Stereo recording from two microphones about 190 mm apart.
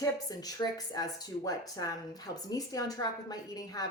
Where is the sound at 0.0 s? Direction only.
20° left (ahead or behind).